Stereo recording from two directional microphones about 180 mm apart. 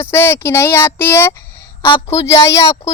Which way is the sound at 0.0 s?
15° left (ahead or behind).